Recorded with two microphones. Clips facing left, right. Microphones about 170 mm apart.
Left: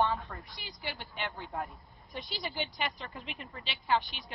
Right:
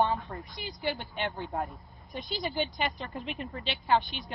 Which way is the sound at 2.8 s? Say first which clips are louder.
Right 4 dB; 45° right (ahead or behind).